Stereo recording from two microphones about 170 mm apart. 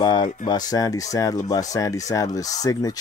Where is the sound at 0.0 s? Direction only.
25° left (ahead or behind).